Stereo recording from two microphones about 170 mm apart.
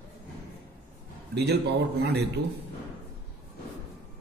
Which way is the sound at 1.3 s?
80° right.